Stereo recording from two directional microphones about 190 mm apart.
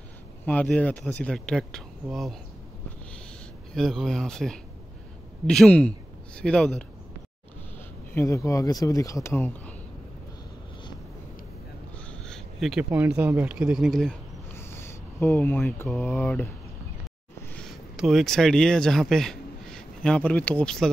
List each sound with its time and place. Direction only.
0.5 s speech: 5° left (ahead or behind)
3.7 s a man's voice: centre (ahead or behind)
8.1 s speech: 15° left (ahead or behind)
12.1 s a sound: centre (ahead or behind)
13.0 s speech: 10° right (ahead or behind)
14.5 s speech: 15° left (ahead or behind)
17.6 s speech: centre (ahead or behind)